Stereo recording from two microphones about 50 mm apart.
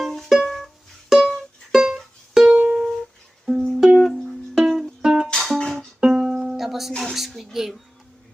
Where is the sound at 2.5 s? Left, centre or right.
Right.